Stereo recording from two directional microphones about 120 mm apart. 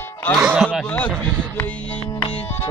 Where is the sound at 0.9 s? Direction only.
10° left (ahead or behind).